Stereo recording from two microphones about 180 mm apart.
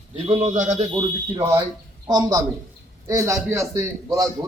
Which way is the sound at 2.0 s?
20° right (ahead or behind).